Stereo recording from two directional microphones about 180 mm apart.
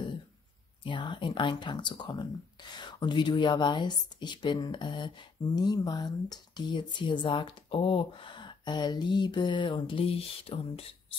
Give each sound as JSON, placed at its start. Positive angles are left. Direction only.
{"t": 0.8, "sound": "speech", "side_deg": 25}